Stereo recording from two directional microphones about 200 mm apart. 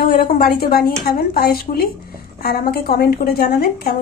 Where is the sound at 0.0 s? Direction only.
45° left (ahead or behind).